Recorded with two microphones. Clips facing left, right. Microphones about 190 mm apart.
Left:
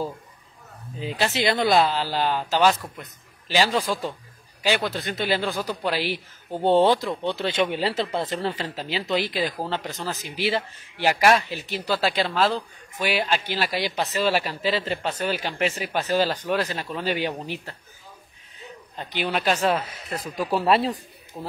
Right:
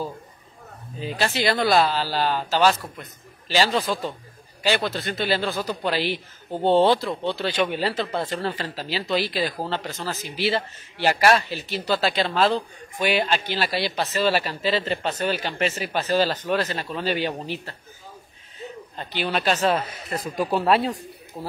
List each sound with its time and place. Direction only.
1.0 s speech: 20° left (ahead or behind)
18.9 s speech: 10° left (ahead or behind)